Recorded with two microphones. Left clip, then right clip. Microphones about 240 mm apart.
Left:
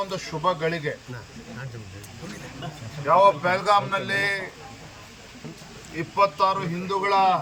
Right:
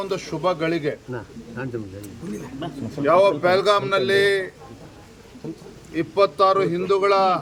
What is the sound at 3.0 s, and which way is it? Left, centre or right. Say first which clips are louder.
Speech: right 1 dB; right.